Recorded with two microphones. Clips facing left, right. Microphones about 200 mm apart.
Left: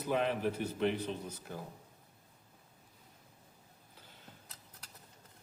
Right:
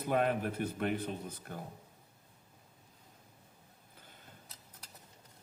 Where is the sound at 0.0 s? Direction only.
50° right (ahead or behind).